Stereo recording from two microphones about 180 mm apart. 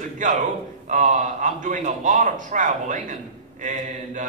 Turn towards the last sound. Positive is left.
turn(degrees=-45)  # may be behind; listen again after turning